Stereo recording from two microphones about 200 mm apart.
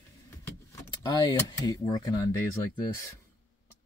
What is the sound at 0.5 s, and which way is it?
Speech, 15° left (ahead or behind).